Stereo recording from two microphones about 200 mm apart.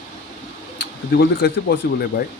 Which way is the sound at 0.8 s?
55° left (ahead or behind).